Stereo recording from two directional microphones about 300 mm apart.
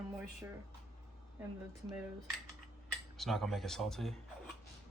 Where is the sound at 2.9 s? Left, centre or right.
Centre.